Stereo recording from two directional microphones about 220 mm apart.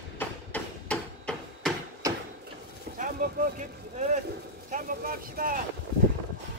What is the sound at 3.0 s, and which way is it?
Speech, 35° right (ahead or behind).